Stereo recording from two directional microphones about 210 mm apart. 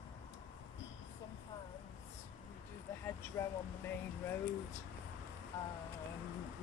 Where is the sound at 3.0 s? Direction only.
10° left (ahead or behind).